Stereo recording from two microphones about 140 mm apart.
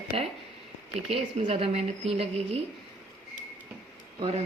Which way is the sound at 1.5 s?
45° right (ahead or behind).